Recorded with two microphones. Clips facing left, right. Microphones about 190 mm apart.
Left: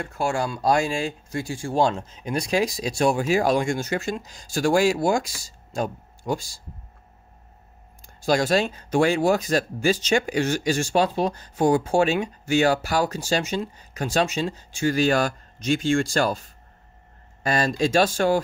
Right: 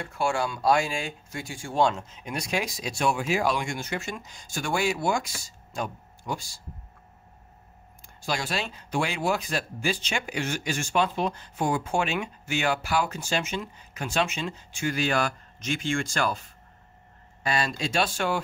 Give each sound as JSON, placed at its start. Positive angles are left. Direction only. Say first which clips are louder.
{"t": 0.0, "sound": "speech", "louder": "left 2 dB", "side_deg": 40}
{"t": 8.3, "sound": "speech", "louder": "left 10 dB", "side_deg": 45}